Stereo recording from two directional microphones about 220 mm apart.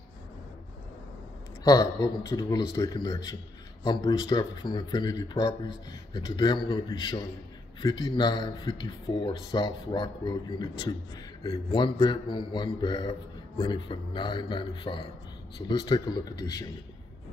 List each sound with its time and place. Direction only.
1.6 s a man's voice: 15° left (ahead or behind)